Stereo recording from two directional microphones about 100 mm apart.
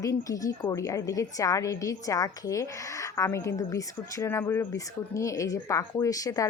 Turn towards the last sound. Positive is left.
turn(degrees=35)  # may be behind; listen again after turning